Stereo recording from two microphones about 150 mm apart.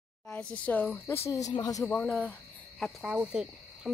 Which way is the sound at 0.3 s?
5° left (ahead or behind).